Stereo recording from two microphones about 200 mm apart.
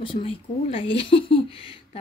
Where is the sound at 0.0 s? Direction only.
25° left (ahead or behind).